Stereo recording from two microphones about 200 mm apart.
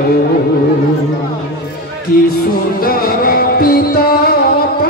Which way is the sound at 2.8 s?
45° left (ahead or behind).